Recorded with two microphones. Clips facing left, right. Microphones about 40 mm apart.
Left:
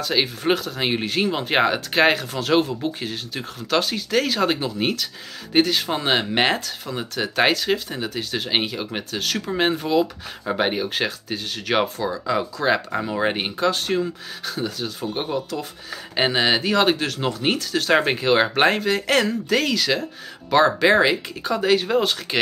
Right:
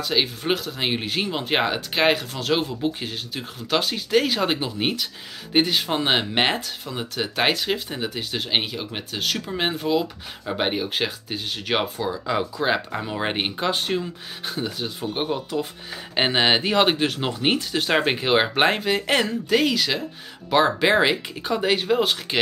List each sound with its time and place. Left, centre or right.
0.0 s speech: centre